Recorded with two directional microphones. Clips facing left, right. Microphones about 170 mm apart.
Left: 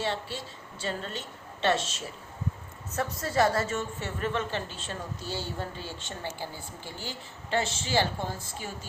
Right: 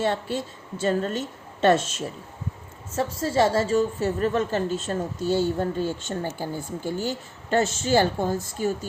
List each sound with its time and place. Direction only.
0.0 s a woman's voice: 50° right (ahead or behind)
2.9 s a woman's voice: 30° right (ahead or behind)